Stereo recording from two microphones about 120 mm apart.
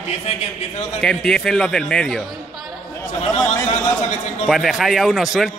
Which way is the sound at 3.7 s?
75° left (ahead or behind).